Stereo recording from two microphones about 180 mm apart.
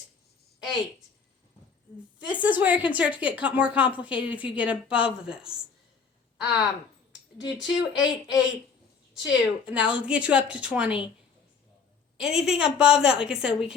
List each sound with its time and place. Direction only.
2.2 s a woman's voice: 10° right (ahead or behind)
7.7 s a woman's voice: 5° right (ahead or behind)
12.2 s a woman's voice: 5° right (ahead or behind)